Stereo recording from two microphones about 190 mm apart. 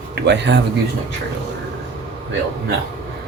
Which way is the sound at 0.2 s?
65° right (ahead or behind).